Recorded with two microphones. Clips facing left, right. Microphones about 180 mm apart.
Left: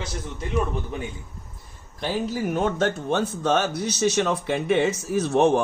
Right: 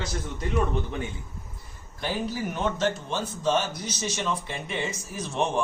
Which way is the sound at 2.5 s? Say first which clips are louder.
Left 4 dB; 55° left (ahead or behind).